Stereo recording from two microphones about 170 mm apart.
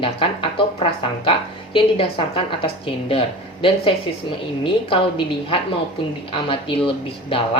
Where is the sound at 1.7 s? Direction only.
30° left (ahead or behind).